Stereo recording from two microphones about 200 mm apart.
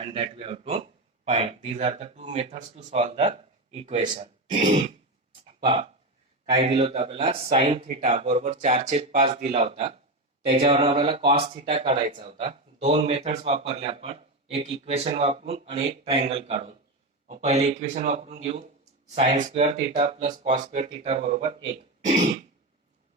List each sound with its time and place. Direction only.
0.0 s speech: 30° right (ahead or behind)